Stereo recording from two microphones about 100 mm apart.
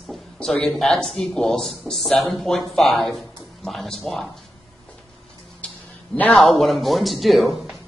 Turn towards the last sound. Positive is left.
turn(degrees=0)  # may be behind; listen again after turning